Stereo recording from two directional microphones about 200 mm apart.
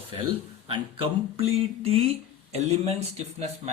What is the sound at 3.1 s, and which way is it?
Speech, 35° right (ahead or behind).